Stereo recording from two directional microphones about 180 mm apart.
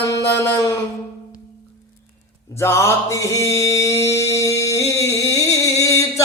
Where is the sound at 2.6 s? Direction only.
15° left (ahead or behind).